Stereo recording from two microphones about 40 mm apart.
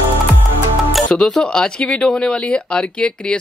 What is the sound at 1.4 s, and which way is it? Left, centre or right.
Speech, centre.